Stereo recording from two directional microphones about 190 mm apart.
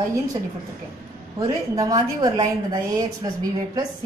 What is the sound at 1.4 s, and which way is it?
A woman's voice, 20° right (ahead or behind).